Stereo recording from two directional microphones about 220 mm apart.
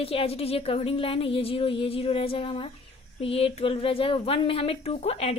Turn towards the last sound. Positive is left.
turn(degrees=25)  # may be behind; listen again after turning